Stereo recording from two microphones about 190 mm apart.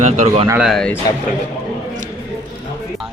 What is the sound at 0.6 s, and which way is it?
Speech, centre (ahead or behind).